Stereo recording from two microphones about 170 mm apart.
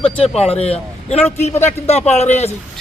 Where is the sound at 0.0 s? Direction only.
35° left (ahead or behind).